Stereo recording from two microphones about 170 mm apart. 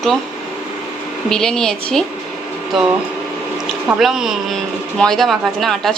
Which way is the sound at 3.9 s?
Centre (ahead or behind).